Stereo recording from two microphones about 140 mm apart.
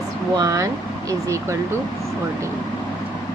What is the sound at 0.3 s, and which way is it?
Speech, 25° right (ahead or behind).